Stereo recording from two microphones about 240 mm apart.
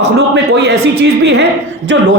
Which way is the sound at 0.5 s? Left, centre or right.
Right.